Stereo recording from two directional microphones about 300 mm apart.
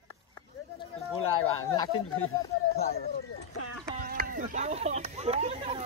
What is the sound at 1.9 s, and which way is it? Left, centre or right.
Speech, left.